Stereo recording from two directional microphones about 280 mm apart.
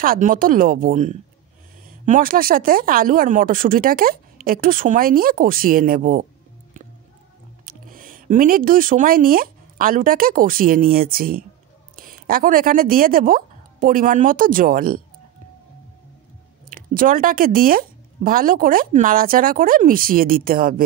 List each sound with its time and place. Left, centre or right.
0.0 s speech: right
7.6 s speech: right
16.6 s speech: right